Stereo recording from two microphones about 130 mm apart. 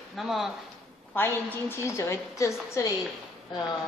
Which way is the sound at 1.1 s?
15° left (ahead or behind).